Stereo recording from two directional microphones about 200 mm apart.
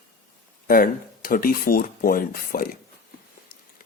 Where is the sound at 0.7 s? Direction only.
45° left (ahead or behind).